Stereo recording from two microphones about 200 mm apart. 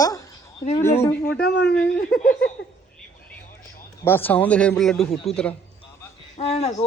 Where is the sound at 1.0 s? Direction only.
10° left (ahead or behind).